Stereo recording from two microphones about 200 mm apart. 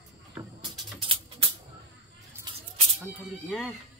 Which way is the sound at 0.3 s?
20° right (ahead or behind).